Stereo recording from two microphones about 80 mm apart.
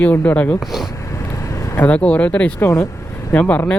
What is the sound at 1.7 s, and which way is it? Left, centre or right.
Speech, centre.